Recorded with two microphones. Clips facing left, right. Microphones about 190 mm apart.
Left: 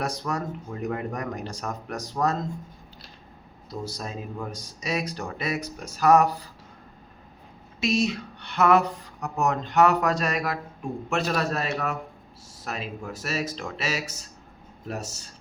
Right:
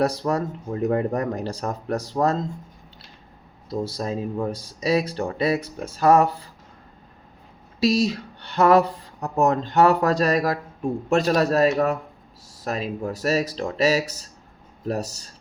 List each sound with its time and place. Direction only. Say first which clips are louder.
0.0 s speech: right 7 dB; 35° right (ahead or behind)
3.7 s speech: right 7 dB; 30° right (ahead or behind)
7.8 s speech: right 4 dB; 35° right (ahead or behind)